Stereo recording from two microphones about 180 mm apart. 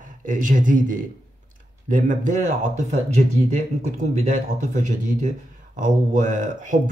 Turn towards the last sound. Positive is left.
turn(degrees=-45)  # may be behind; listen again after turning